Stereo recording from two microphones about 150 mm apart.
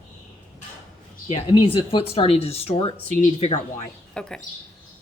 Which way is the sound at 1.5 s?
35° left (ahead or behind).